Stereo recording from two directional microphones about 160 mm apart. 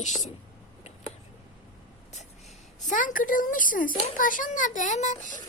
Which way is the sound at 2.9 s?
55° left (ahead or behind).